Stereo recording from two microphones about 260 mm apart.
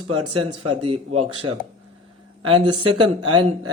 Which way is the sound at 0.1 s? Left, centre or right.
Right.